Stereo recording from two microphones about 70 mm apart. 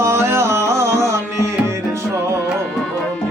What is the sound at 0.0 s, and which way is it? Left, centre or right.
Music, right.